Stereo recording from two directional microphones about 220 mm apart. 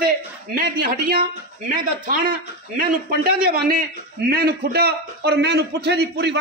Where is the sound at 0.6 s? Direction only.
40° right (ahead or behind).